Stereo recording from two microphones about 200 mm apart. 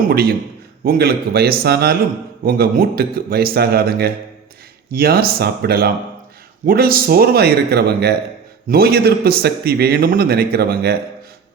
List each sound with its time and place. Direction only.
0.1 s a man's voice: 50° right (ahead or behind)